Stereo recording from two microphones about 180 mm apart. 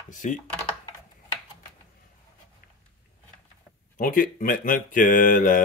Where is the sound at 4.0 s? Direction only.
50° left (ahead or behind).